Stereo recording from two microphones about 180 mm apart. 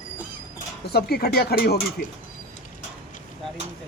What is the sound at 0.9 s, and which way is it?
Speech, 60° left (ahead or behind).